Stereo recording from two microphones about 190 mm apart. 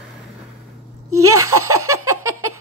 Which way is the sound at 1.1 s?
15° right (ahead or behind).